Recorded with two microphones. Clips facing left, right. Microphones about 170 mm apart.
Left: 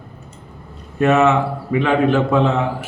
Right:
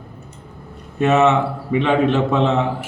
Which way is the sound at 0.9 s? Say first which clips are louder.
Left 1 dB; centre (ahead or behind).